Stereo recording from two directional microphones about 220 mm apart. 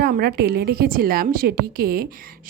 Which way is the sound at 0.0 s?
45° right (ahead or behind).